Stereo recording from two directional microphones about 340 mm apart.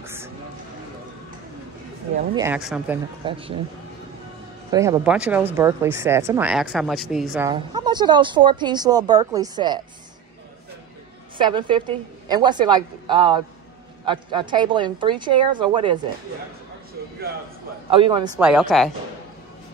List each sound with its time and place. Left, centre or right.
0.0 s a sound: centre
2.3 s speech: centre
3.3 s speech: centre
4.6 s speech: centre
11.3 s speech: centre
17.9 s speech: centre